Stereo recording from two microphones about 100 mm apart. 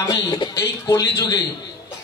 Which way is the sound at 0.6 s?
30° left (ahead or behind).